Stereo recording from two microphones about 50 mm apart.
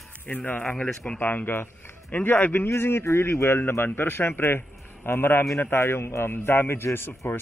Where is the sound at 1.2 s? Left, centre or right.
Left.